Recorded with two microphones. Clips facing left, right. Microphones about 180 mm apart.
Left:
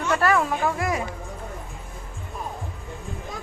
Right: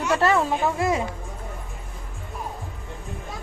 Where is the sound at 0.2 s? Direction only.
25° right (ahead or behind).